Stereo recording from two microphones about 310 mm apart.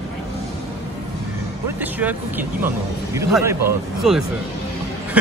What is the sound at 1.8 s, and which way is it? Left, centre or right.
Speech, centre.